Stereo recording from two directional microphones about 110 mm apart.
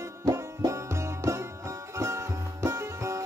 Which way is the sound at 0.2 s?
25° right (ahead or behind).